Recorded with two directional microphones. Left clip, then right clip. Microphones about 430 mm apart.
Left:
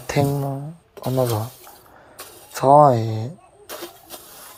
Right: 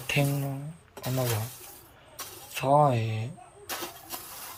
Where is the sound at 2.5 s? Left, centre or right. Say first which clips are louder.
Left 10 dB; left.